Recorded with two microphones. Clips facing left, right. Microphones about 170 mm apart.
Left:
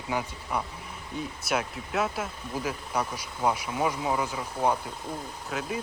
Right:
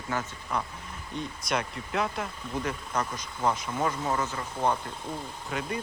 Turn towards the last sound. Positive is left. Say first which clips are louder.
# even
turn(degrees=0)  # may be behind; listen again after turning